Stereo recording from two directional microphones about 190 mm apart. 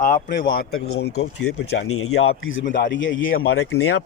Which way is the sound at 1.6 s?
90° left.